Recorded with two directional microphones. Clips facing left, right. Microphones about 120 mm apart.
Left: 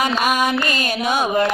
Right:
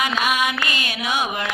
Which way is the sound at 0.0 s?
40° left (ahead or behind).